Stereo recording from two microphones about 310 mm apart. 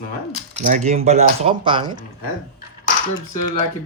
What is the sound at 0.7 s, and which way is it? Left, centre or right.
Speech, right.